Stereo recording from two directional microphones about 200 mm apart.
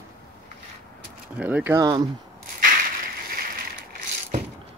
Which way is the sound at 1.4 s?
10° right (ahead or behind).